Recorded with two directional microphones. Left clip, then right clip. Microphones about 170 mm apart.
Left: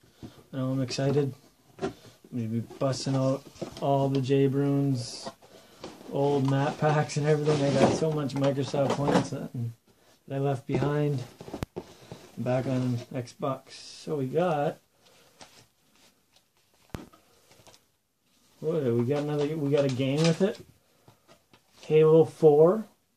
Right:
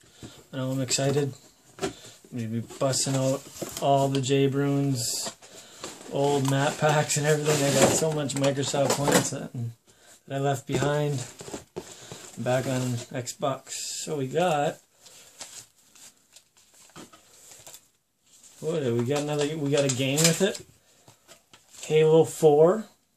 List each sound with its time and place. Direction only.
0.2 s speech: 10° right (ahead or behind)
10.2 s a sound: 15° right (ahead or behind)
12.4 s speech: 15° right (ahead or behind)
18.7 s speech: 15° right (ahead or behind)